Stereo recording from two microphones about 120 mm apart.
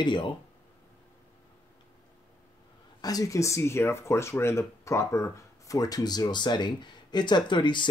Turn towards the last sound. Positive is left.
turn(degrees=40)  # may be behind; listen again after turning